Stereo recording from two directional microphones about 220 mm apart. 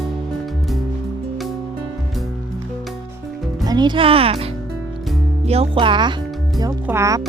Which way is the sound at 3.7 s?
20° right (ahead or behind).